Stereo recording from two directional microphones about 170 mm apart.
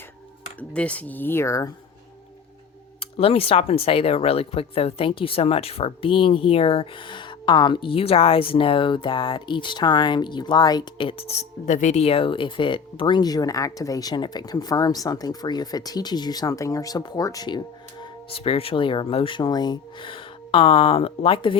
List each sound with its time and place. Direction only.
0.7 s speech: 5° left (ahead or behind)
3.0 s speech: 35° left (ahead or behind)